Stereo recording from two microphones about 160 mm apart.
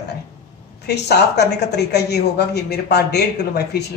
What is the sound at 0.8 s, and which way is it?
A man's voice, 90° left.